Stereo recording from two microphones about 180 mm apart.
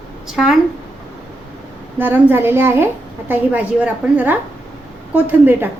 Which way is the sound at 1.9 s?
10° right (ahead or behind).